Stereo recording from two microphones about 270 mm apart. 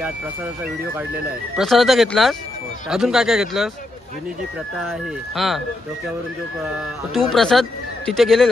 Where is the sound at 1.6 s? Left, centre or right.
Centre.